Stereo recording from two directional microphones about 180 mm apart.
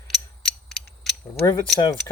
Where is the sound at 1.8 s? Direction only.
20° left (ahead or behind).